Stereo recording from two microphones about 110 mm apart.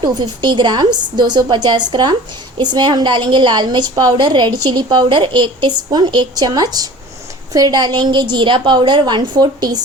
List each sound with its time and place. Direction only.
0.0 s a woman's voice: 45° right (ahead or behind)